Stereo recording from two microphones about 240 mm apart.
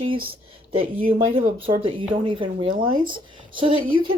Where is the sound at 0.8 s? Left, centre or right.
Right.